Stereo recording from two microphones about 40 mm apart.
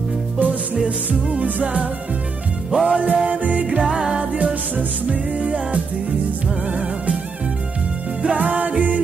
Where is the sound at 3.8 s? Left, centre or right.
Right.